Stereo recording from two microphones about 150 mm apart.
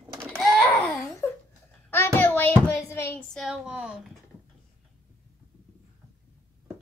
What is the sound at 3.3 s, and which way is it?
Speech, centre (ahead or behind).